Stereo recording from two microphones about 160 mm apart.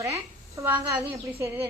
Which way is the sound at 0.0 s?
20° right (ahead or behind).